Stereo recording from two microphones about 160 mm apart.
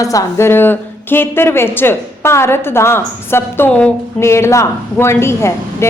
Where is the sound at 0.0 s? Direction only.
20° left (ahead or behind).